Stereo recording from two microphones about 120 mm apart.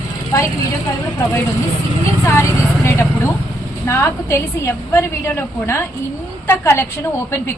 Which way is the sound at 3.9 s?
20° left (ahead or behind).